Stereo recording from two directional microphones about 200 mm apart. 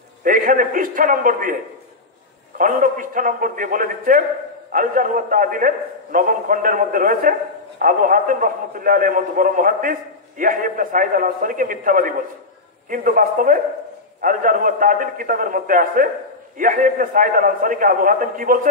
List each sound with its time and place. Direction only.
0.2 s a man's voice: 45° right (ahead or behind)